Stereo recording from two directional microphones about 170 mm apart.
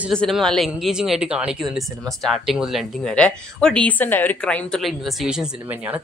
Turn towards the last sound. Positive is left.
turn(degrees=-10)  # may be behind; listen again after turning